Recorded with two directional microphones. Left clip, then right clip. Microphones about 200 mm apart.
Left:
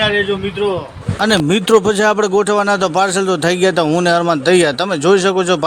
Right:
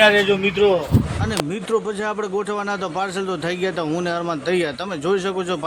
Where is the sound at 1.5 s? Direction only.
45° left (ahead or behind).